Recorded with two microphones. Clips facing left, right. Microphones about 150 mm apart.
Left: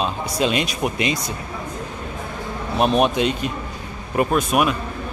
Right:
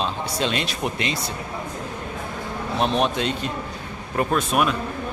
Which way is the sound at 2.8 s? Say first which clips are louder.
Left 5 dB; 15° left (ahead or behind).